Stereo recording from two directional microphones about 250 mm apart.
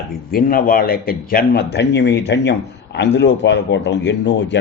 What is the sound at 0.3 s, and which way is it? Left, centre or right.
A man's voice, left.